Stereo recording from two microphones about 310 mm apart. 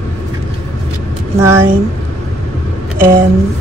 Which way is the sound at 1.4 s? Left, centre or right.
Centre.